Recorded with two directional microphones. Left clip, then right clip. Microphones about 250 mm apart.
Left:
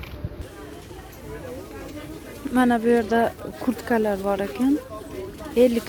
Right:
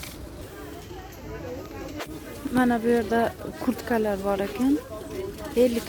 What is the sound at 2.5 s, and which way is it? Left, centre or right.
Speech, centre.